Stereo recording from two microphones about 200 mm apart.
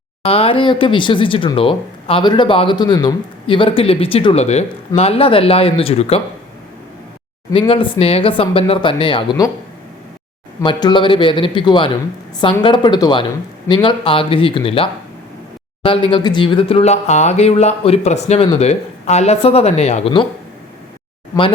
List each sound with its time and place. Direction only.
0.2 s speech: 30° left (ahead or behind)
7.5 s speech: 25° left (ahead or behind)
10.6 s speech: 20° left (ahead or behind)